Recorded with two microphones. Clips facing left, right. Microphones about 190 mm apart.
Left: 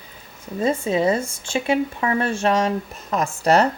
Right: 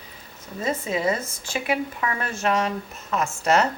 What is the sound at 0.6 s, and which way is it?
Speech, 30° left (ahead or behind).